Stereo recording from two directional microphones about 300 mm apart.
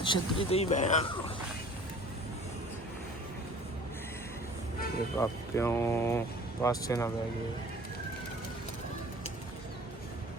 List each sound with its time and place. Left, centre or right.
0.0 s speech: centre
5.1 s speech: centre